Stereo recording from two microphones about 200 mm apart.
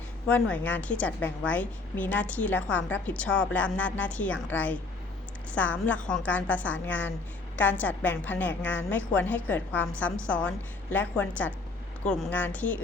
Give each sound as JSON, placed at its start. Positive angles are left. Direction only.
{"t": 0.3, "sound": "a woman's voice", "side_deg": 5}